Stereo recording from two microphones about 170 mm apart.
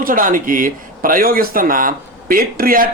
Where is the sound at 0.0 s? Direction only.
50° right (ahead or behind).